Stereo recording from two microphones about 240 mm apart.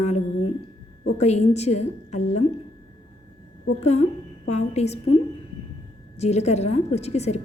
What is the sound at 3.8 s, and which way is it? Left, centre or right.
A woman's voice, left.